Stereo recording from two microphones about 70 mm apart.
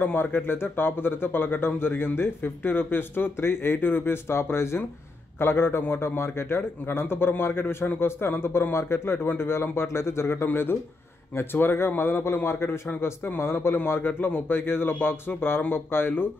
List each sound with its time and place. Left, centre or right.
0.0 s a man's voice: left